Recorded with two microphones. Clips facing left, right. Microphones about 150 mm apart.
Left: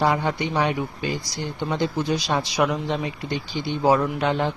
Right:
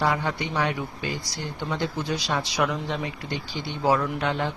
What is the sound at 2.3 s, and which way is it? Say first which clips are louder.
Speech: left 3 dB; 20° left (ahead or behind).